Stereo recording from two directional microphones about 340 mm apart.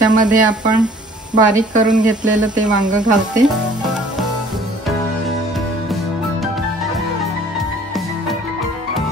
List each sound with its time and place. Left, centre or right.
0.0 s speech: centre